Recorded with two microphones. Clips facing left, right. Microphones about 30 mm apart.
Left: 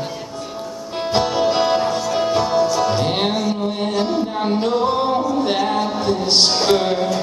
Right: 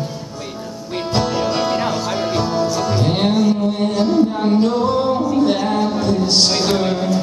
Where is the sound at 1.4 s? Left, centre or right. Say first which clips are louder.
Left 2 dB; centre.